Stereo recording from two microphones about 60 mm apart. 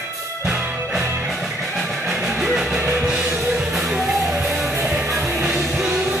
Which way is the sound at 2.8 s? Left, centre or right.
Right.